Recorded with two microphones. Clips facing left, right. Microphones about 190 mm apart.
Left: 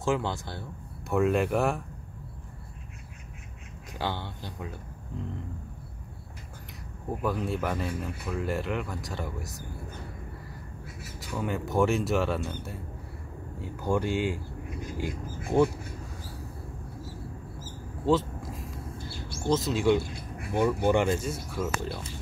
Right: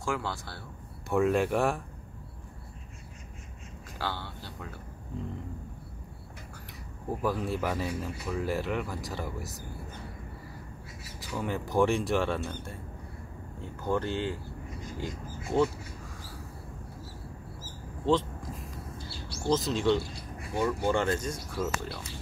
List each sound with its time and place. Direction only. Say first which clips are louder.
0.0 s speech: left 5 dB; 20° left (ahead or behind)
1.1 s speech: left 1 dB; centre (ahead or behind)
4.0 s speech: left 3 dB; 15° left (ahead or behind)
7.1 s speech: even; centre (ahead or behind)
11.1 s speech: left 1 dB; centre (ahead or behind)
18.0 s vehicle: left 2 dB; 5° left (ahead or behind)
19.0 s bird: left 3 dB; 50° left (ahead or behind)
19.5 s speech: left 2 dB; 5° left (ahead or behind)